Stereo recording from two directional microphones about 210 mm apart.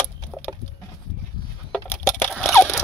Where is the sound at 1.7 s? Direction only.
10° left (ahead or behind).